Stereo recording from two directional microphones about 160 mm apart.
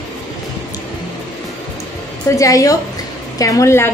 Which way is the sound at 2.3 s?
20° left (ahead or behind).